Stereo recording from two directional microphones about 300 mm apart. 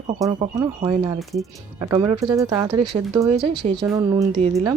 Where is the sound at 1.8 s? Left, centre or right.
Centre.